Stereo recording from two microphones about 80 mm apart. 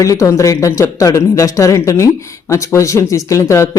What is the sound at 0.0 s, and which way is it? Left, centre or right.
Speech, left.